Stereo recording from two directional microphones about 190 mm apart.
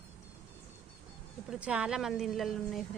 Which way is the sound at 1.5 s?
5° right (ahead or behind).